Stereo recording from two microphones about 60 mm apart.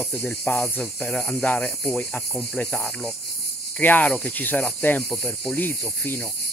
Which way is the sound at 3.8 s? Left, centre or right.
Left.